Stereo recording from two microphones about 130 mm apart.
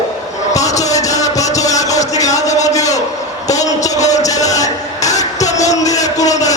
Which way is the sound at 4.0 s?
65° left (ahead or behind).